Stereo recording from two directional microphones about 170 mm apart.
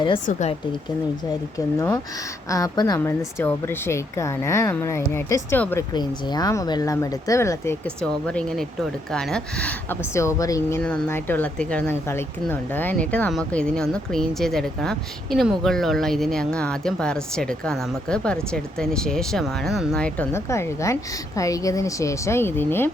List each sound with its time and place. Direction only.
0.3 s speech: 45° left (ahead or behind)
1.5 s speech: 20° left (ahead or behind)
5.9 s speech: 25° left (ahead or behind)